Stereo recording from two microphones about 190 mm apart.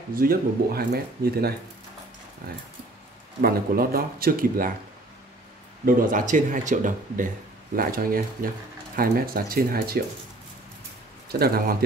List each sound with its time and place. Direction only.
0.1 s speech: 50° right (ahead or behind)
3.4 s speech: 50° right (ahead or behind)
5.9 s speech: 45° right (ahead or behind)
11.3 s speech: 55° right (ahead or behind)